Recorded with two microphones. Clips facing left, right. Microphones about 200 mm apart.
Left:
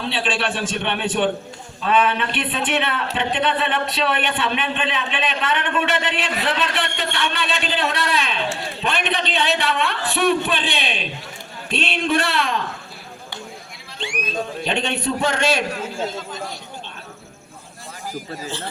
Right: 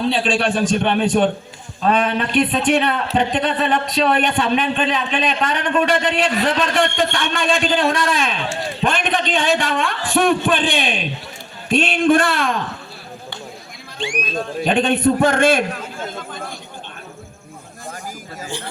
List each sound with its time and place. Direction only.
0.0 s a man's voice: 40° right (ahead or behind)
14.6 s a man's voice: 50° right (ahead or behind)
18.4 s speech: 15° right (ahead or behind)